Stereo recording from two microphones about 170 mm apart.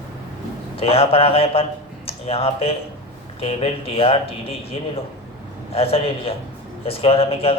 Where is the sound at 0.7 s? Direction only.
35° left (ahead or behind).